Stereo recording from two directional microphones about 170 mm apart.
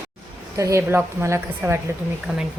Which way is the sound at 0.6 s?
15° right (ahead or behind).